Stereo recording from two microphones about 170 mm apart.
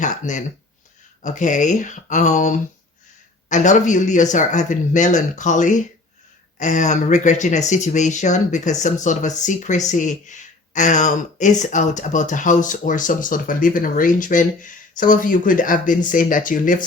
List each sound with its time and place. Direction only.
0.0 s speech: 45° left (ahead or behind)